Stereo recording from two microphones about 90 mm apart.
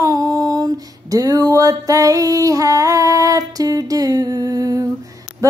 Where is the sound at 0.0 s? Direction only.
40° right (ahead or behind).